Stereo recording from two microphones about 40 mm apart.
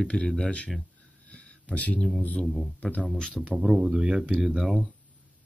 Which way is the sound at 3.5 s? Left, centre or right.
Centre.